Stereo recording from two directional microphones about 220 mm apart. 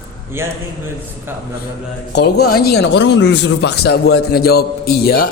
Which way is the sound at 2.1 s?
50° left (ahead or behind).